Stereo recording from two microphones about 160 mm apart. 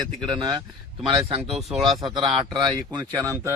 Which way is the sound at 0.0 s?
30° right (ahead or behind).